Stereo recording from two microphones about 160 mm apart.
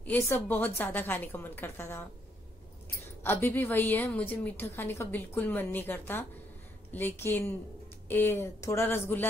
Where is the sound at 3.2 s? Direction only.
15° left (ahead or behind).